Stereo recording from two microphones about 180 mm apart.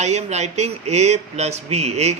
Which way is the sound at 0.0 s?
40° right (ahead or behind).